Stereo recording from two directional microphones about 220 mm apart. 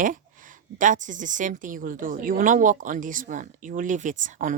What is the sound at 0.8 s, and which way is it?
Speech, 35° right (ahead or behind).